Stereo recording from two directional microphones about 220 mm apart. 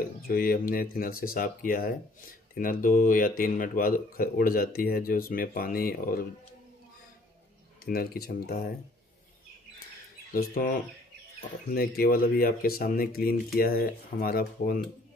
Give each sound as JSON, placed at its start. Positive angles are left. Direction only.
{"t": 0.3, "sound": "speech", "side_deg": 40}
{"t": 7.8, "sound": "speech", "side_deg": 45}
{"t": 10.3, "sound": "speech", "side_deg": 40}
{"t": 11.7, "sound": "speech", "side_deg": 45}